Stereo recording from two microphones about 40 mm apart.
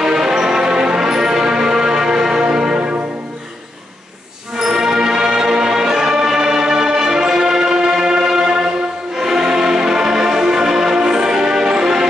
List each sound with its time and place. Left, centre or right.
0.0 s music: centre
4.6 s music: centre